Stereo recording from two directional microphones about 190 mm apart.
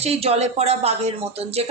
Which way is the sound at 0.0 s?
30° right (ahead or behind).